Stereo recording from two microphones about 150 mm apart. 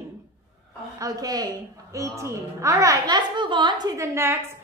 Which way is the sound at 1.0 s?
25° right (ahead or behind).